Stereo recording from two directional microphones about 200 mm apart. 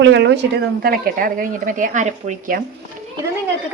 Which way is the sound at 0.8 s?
45° right (ahead or behind).